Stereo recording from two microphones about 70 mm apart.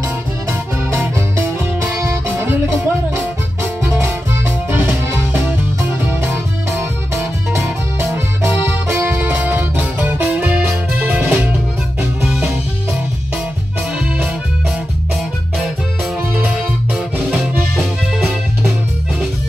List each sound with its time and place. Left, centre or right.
2.2 s music: right
5.9 s music: right
9.4 s music: right
16.5 s music: centre